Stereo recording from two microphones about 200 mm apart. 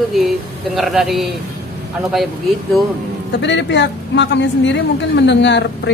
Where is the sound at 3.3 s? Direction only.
60° left (ahead or behind).